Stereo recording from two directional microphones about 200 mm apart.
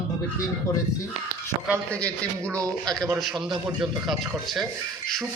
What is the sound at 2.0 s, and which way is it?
Speech, 5° left (ahead or behind).